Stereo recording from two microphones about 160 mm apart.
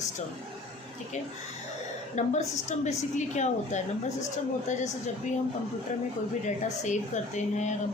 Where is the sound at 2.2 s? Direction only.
45° left (ahead or behind).